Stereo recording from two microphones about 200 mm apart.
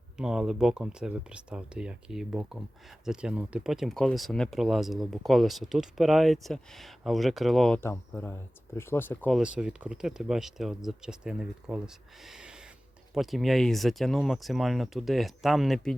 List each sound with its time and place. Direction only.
0.2 s speech: 5° right (ahead or behind)
9.4 s speech: 5° right (ahead or behind)